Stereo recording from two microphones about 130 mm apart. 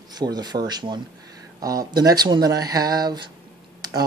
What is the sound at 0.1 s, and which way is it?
Speech, 30° right (ahead or behind).